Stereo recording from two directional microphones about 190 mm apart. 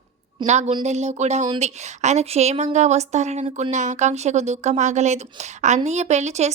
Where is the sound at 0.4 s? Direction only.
35° right (ahead or behind).